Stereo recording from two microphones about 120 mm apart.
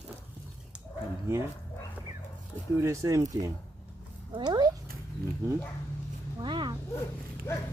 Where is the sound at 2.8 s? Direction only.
25° right (ahead or behind).